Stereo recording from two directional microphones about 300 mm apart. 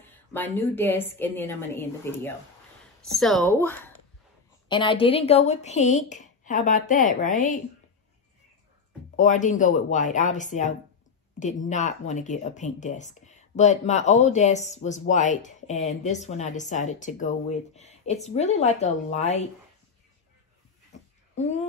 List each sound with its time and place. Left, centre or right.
0.0 s a woman's voice: centre; by 7.6 s left
9.1 s speech: left
21.4 s speech: left